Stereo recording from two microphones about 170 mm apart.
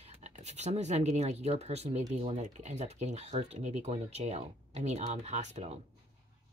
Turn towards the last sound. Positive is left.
turn(degrees=-40)  # may be behind; listen again after turning